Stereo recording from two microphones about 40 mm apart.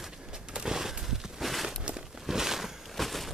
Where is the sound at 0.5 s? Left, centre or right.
Centre.